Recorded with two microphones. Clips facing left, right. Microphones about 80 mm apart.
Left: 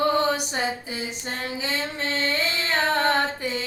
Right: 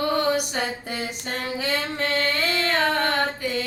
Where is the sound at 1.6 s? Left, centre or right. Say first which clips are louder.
Right 4 dB; right.